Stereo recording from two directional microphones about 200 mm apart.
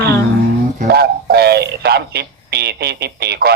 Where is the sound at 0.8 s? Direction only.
50° right (ahead or behind).